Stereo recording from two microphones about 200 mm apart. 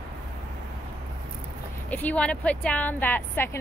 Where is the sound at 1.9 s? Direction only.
5° left (ahead or behind).